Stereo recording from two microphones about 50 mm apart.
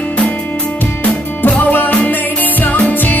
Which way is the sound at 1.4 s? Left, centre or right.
Left.